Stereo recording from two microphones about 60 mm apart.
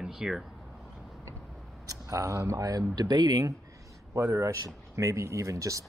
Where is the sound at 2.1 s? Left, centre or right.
Right.